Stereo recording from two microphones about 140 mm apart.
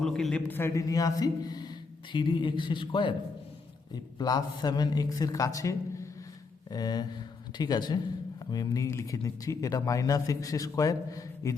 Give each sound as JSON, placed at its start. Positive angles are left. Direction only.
{"t": 0.0, "sound": "speech", "side_deg": 5}